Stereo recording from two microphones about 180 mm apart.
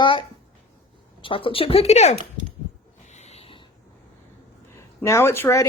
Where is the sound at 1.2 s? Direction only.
30° left (ahead or behind).